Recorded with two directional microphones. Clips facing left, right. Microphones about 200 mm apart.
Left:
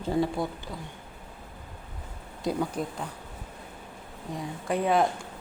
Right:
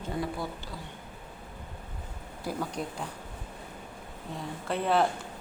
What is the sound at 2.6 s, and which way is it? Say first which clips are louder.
Speech: left 4 dB; 5° left (ahead or behind).